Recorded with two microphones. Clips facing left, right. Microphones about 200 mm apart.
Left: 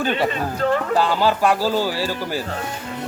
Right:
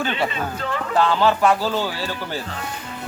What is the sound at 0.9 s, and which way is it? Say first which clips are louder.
Speech: even; 10° left (ahead or behind).